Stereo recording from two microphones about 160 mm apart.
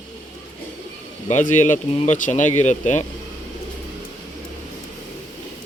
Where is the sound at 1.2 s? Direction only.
50° left (ahead or behind).